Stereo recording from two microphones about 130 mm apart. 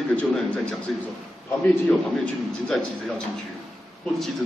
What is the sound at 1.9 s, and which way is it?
A man's voice, 10° left (ahead or behind).